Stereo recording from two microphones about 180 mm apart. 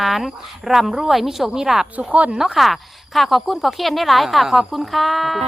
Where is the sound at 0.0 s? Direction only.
Centre (ahead or behind).